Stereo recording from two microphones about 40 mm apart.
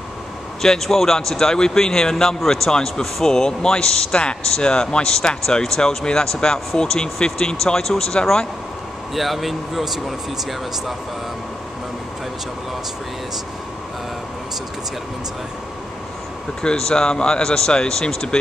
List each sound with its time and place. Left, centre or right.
0.6 s speech: centre
9.1 s speech: centre
16.6 s speech: centre